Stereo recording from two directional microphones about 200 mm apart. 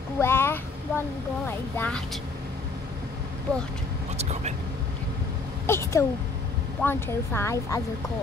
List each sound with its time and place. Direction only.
0.2 s child singing: 10° left (ahead or behind)
1.8 s speech: 5° left (ahead or behind)
4.2 s speech: 35° right (ahead or behind)
5.7 s speech: 15° left (ahead or behind)